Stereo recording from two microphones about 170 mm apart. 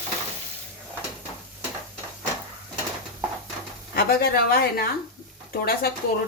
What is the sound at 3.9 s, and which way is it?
Speech, 60° left (ahead or behind).